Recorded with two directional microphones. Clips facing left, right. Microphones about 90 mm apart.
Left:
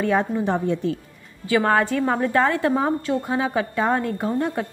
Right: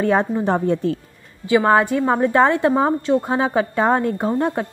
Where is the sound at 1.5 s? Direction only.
20° right (ahead or behind).